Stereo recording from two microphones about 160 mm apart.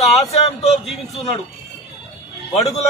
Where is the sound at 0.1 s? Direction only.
40° left (ahead or behind).